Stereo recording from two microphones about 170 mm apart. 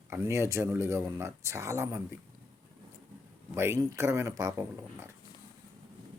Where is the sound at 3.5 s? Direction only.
15° right (ahead or behind).